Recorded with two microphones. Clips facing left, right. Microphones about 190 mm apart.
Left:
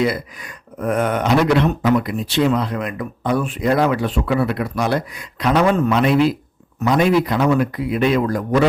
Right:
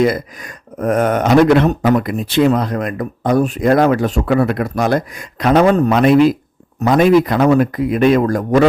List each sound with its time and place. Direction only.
0.0 s speech: 45° right (ahead or behind)